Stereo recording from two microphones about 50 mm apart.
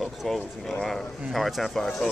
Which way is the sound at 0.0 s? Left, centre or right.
Centre.